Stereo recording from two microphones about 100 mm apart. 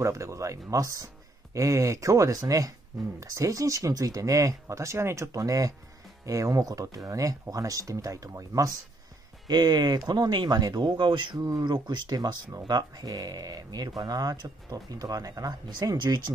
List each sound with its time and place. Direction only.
0.0 s speech: 30° right (ahead or behind); by 16.3 s 45° right (ahead or behind)